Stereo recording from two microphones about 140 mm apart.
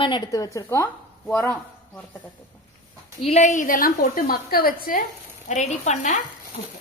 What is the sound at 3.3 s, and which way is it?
A woman's voice, 60° left (ahead or behind).